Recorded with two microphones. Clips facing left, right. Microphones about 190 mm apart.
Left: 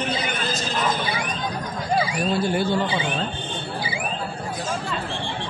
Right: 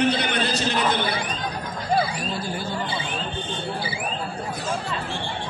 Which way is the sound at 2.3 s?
65° left (ahead or behind).